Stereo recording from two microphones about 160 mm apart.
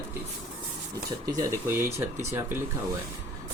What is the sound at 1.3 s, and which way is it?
Speech, 20° right (ahead or behind).